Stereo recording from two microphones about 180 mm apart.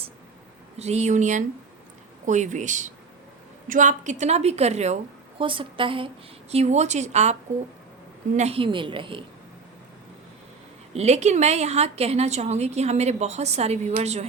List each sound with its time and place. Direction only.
0.8 s a woman's voice: 40° right (ahead or behind)
8.4 s a woman's voice: 35° right (ahead or behind)
10.9 s a woman's voice: 40° right (ahead or behind)